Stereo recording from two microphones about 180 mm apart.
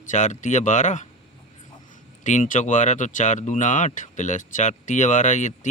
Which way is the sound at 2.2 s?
45° left (ahead or behind).